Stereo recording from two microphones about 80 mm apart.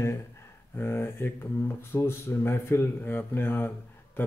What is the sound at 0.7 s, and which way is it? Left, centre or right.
Speech, left.